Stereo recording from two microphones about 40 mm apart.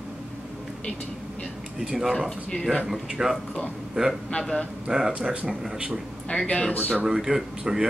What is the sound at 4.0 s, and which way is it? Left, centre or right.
Speech, right.